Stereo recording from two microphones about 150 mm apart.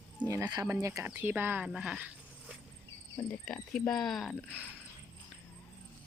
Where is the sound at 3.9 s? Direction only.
Centre (ahead or behind).